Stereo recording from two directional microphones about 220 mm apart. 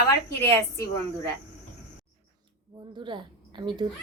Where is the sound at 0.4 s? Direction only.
10° left (ahead or behind).